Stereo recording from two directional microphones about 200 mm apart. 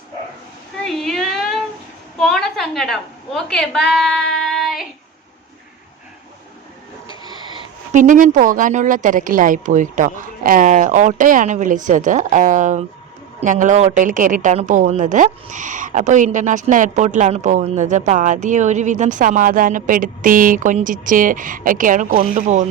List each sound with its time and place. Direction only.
0.9 s a sound: centre (ahead or behind)
2.1 s a woman's voice: centre (ahead or behind)
3.9 s child singing: centre (ahead or behind)
7.9 s a woman's voice: 40° right (ahead or behind)